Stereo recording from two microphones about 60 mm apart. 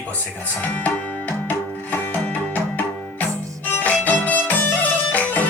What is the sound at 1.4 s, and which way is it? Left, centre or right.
Music, left.